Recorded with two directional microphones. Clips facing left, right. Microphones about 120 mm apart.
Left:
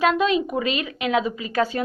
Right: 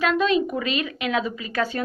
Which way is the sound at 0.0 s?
20° left (ahead or behind).